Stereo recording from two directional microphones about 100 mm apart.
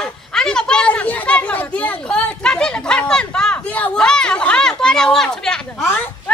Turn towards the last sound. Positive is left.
turn(degrees=20)  # may be behind; listen again after turning